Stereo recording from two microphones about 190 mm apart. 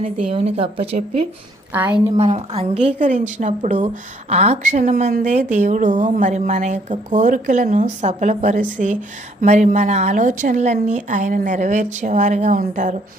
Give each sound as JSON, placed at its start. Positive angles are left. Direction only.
{"t": 0.0, "sound": "a woman's voice", "side_deg": -30}
{"t": 1.7, "sound": "a woman's voice", "side_deg": -10}
{"t": 2.1, "sound": "a woman's voice", "side_deg": -35}